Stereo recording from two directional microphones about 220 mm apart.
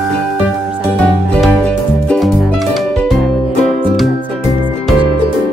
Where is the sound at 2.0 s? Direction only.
Centre (ahead or behind).